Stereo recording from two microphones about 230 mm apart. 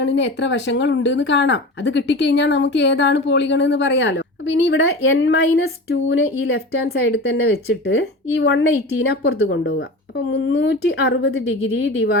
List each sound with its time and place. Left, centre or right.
0.0 s a woman's voice: left